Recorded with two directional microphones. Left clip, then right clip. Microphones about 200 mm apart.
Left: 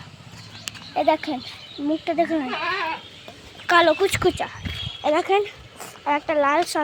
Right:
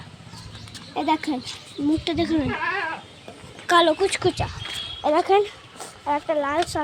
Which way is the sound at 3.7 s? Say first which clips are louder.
Left 1 dB; centre (ahead or behind).